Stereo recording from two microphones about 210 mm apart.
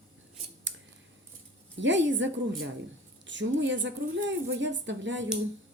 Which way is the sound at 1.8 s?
60° right (ahead or behind).